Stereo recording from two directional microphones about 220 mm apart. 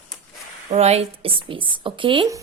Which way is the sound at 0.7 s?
30° right (ahead or behind).